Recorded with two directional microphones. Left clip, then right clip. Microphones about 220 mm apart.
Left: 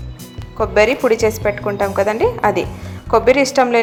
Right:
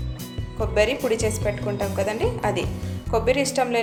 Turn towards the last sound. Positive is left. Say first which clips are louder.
# left 9 dB
turn(degrees=15)  # may be behind; listen again after turning